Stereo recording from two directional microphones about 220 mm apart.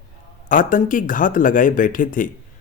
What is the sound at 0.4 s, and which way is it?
Speech, 35° left (ahead or behind).